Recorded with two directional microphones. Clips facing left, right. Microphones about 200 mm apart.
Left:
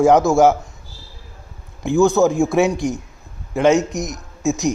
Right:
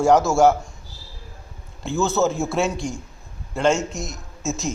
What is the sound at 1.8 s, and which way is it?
A man's voice, 15° left (ahead or behind).